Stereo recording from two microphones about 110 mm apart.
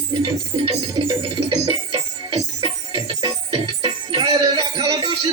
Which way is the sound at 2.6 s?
40° right (ahead or behind).